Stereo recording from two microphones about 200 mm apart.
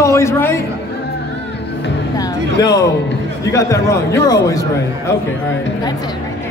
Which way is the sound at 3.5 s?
15° left (ahead or behind).